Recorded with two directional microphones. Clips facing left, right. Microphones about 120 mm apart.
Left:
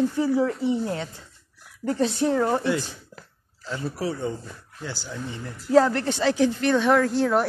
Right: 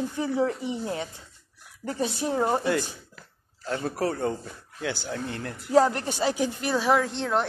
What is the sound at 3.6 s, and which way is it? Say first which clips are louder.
Speech: right 1 dB; 50° right (ahead or behind).